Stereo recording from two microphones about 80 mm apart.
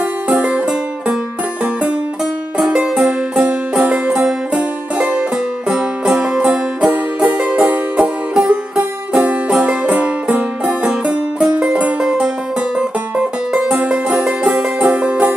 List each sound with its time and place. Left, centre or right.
0.3 s music: centre